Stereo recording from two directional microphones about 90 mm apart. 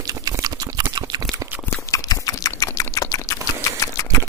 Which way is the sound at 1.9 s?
40° left (ahead or behind).